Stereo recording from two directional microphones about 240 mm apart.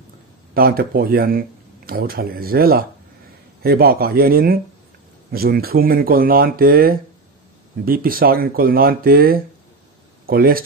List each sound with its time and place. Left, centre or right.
0.6 s speech: right